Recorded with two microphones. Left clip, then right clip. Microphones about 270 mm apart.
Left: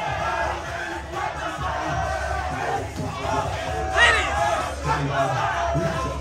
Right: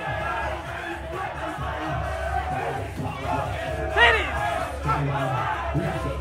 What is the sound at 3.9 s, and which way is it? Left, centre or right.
Music, centre.